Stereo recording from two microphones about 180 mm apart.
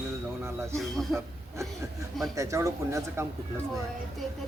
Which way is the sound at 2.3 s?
15° right (ahead or behind).